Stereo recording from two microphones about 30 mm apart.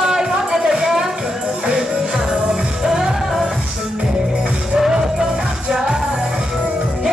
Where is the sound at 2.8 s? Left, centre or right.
Centre.